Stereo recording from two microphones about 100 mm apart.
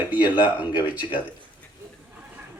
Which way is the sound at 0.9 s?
15° right (ahead or behind).